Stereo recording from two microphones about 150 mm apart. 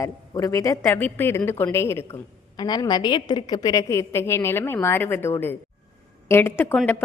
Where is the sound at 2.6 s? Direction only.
30° left (ahead or behind).